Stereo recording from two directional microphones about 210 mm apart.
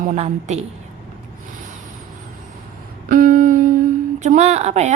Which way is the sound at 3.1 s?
40° right (ahead or behind).